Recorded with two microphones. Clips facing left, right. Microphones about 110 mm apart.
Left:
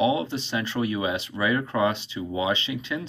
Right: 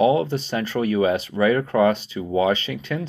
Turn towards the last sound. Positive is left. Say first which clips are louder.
# right 3 dB
turn(degrees=-45)  # may be behind; listen again after turning